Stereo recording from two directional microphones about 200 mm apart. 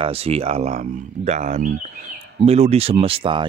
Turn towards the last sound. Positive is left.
turn(degrees=-25)  # may be behind; listen again after turning